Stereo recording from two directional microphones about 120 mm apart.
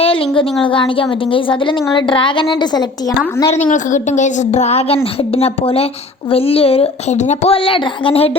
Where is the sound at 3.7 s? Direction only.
90° left; by 7.5 s 70° left (ahead or behind).